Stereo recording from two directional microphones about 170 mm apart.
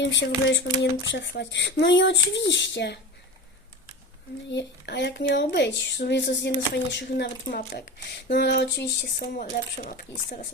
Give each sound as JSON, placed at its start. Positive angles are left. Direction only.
{"t": 0.0, "sound": "speech", "side_deg": 90}
{"t": 4.5, "sound": "speech", "side_deg": 90}
{"t": 9.1, "sound": "speech", "side_deg": 50}